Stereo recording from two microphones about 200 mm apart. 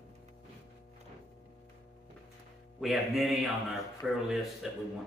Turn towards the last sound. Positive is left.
turn(degrees=0)  # may be behind; listen again after turning